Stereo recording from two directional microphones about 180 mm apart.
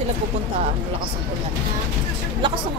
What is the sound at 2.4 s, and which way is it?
Speech, 25° right (ahead or behind).